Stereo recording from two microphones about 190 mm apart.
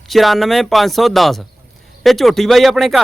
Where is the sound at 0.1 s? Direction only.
Centre (ahead or behind).